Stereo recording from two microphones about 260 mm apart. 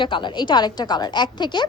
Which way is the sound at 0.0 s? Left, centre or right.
Centre.